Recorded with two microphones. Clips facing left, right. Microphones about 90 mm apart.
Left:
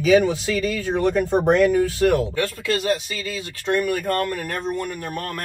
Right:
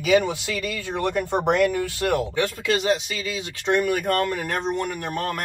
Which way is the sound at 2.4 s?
20° right (ahead or behind).